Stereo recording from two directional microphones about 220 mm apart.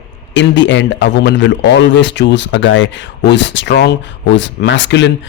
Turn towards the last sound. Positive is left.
turn(degrees=55)  # may be behind; listen again after turning